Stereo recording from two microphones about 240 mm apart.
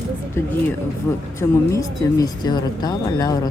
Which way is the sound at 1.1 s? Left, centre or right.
Centre.